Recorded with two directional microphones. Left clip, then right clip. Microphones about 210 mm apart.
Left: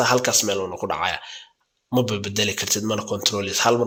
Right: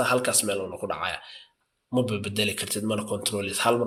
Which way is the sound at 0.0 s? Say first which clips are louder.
Left 5 dB; 25° left (ahead or behind).